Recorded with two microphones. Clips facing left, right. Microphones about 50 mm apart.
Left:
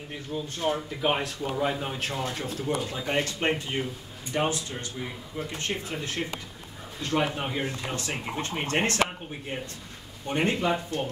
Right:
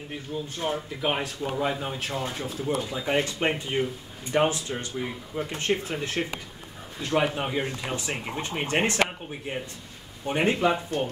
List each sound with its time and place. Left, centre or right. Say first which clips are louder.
0.3 s speech: left 1 dB; centre
5.7 s speech: right 5 dB; right
7.0 s speech: right 2 dB; centre
10.2 s speech: right 3 dB; centre